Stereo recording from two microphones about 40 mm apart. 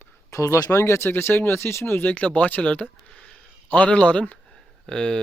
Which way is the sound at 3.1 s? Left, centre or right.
Centre.